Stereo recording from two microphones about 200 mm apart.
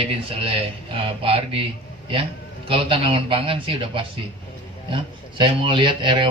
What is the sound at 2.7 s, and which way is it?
Speech, 25° right (ahead or behind).